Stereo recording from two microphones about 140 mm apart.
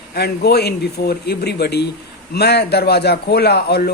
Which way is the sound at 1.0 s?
90° left.